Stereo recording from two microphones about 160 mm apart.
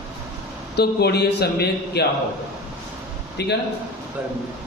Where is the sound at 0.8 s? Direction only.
90° left.